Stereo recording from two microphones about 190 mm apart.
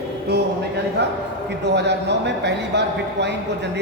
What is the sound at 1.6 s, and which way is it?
A man's voice, 65° right (ahead or behind).